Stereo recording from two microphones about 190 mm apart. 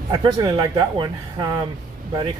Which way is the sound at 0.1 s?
20° right (ahead or behind).